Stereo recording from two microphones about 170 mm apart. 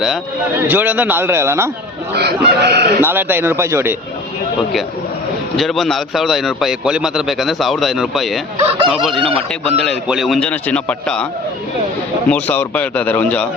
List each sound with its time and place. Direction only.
0.5 s a man's voice: 10° right (ahead or behind)
2.1 s speech: 75° right (ahead or behind)
3.0 s a man's voice: 10° right (ahead or behind)
5.5 s a man's voice: centre (ahead or behind)
12.3 s a man's voice: 10° left (ahead or behind)